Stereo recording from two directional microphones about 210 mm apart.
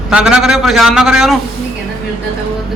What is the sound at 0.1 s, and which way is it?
A man's voice, 5° right (ahead or behind).